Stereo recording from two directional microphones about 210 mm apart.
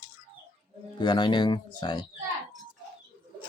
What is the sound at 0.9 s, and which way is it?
Speech, 20° left (ahead or behind).